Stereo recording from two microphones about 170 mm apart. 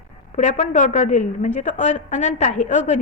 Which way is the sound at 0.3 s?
40° left (ahead or behind).